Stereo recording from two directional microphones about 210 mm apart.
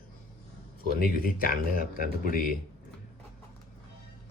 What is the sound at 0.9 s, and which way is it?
Speech, 45° left (ahead or behind).